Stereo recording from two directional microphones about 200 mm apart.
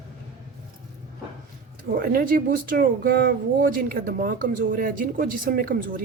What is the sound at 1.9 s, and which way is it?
Speech, 45° right (ahead or behind).